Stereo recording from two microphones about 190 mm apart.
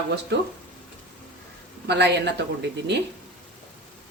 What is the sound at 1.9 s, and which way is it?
Speech, 65° right (ahead or behind).